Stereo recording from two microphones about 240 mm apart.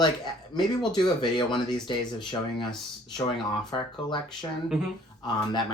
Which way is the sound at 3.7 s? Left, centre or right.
Centre.